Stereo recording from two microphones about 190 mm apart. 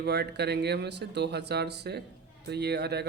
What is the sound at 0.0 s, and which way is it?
A man's voice, 60° right (ahead or behind).